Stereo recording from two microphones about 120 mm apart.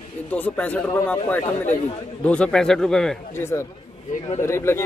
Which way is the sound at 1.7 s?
65° left (ahead or behind).